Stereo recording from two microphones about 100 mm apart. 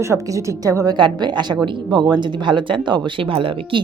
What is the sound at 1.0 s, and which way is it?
A woman's voice, 50° right (ahead or behind).